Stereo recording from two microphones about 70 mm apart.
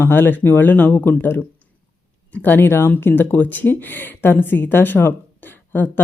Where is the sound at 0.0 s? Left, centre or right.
Left.